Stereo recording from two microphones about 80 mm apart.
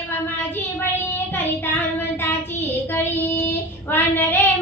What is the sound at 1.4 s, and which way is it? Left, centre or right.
Child singing, left.